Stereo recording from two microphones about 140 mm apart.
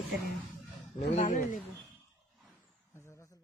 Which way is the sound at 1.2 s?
70° left (ahead or behind).